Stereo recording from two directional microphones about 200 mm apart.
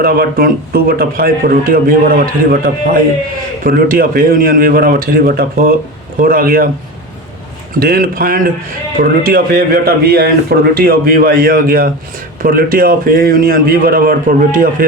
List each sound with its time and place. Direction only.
0.0 s a man's voice: 45° right (ahead or behind)
7.8 s a man's voice: 45° right (ahead or behind)